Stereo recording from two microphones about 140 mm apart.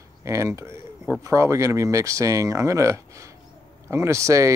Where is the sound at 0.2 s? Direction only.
20° right (ahead or behind).